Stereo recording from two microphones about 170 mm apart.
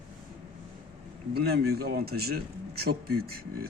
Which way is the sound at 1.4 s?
65° right (ahead or behind).